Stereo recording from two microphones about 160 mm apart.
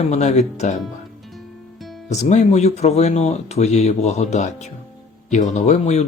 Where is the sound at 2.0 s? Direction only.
45° left (ahead or behind).